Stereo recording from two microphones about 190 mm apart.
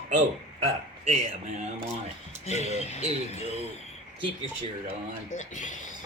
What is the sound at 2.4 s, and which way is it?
Speech, 35° left (ahead or behind).